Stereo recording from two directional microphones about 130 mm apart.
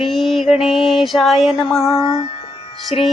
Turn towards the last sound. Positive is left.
turn(degrees=55)  # may be behind; listen again after turning